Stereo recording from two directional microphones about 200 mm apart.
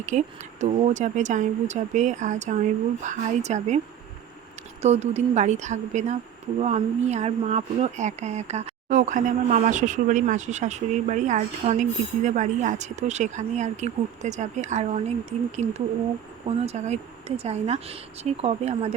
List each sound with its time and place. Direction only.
0.0 s speech: 35° right (ahead or behind)
4.8 s speech: 35° right (ahead or behind)
16.6 s speech: 35° right (ahead or behind)